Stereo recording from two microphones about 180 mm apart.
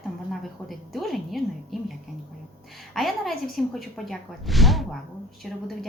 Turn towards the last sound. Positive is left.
turn(degrees=0)  # may be behind; listen again after turning